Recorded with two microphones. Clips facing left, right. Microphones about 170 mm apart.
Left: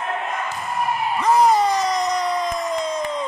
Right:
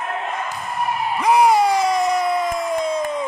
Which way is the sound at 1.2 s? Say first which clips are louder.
Right 2 dB; 10° right (ahead or behind).